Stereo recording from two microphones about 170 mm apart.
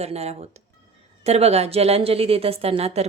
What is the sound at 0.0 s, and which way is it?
A woman's voice, 40° right (ahead or behind).